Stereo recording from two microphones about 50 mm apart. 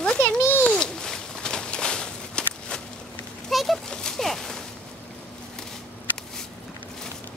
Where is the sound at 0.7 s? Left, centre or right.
Centre.